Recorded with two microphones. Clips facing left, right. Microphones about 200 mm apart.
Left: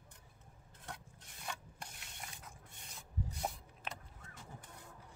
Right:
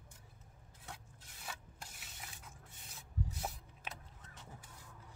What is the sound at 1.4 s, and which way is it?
Rub, 5° right (ahead or behind).